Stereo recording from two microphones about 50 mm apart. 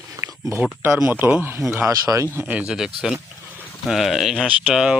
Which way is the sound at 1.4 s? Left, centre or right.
Right.